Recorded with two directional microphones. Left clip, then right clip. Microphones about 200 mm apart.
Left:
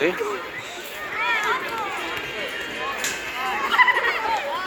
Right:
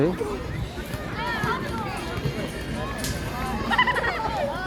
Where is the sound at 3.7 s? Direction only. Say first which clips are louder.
Left 4 dB; 40° left (ahead or behind).